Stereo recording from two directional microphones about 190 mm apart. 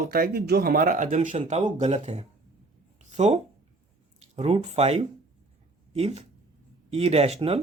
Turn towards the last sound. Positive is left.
turn(degrees=-30)  # may be behind; listen again after turning